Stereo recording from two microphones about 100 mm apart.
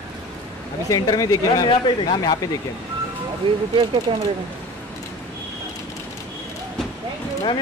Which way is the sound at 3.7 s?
65° right (ahead or behind).